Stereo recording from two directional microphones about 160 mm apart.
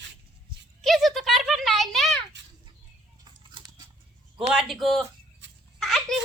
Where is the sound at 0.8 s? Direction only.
Centre (ahead or behind).